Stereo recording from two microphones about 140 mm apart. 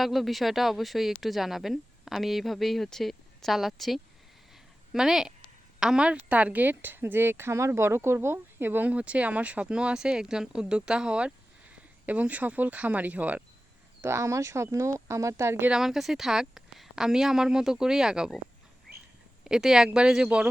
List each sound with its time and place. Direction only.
0.0 s a woman's voice: centre (ahead or behind); by 15.7 s 15° right (ahead or behind)
15.7 s a woman's voice: centre (ahead or behind)
19.5 s a woman's voice: 5° right (ahead or behind)